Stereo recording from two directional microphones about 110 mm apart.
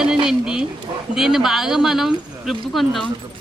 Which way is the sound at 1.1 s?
5° right (ahead or behind).